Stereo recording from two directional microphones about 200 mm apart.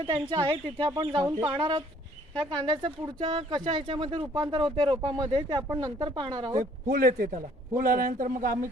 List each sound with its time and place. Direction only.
0.0 s speech: 20° right (ahead or behind)
2.3 s speech: 5° left (ahead or behind)
2.8 s speech: 25° right (ahead or behind)
6.8 s a man's voice: 45° right (ahead or behind)